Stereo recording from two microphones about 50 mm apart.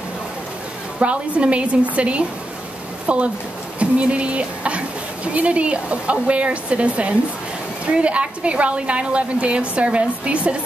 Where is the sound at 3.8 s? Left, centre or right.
Right.